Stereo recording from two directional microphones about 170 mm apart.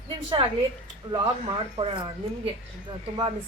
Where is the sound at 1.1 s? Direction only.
30° right (ahead or behind).